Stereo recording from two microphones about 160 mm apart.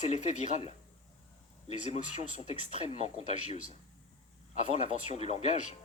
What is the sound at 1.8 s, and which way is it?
Speech, 45° left (ahead or behind).